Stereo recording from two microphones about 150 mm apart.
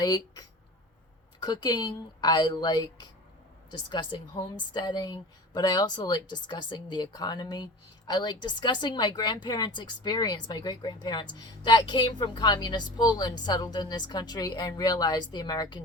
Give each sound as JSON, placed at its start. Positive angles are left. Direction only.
{"t": 0.0, "sound": "speech", "side_deg": 25}